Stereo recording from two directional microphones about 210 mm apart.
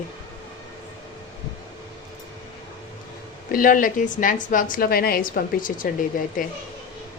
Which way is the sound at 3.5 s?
40° left (ahead or behind).